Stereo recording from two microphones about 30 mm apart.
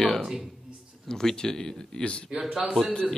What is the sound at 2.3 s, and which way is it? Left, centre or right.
Speech, right.